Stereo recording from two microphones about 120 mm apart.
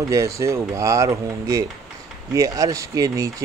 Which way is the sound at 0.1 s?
25° right (ahead or behind).